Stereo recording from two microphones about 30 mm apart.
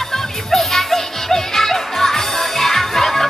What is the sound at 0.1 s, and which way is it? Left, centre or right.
Music, centre.